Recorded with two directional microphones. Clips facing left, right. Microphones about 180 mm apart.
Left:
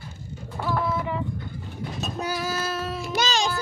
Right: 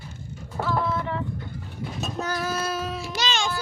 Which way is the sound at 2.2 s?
5° left (ahead or behind).